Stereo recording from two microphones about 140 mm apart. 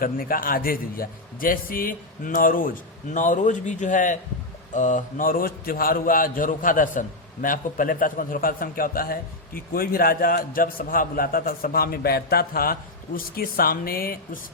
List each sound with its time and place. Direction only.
0.0 s a man's voice: 90° left